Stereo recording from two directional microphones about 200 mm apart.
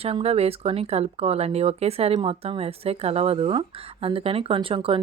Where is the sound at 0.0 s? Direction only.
30° right (ahead or behind).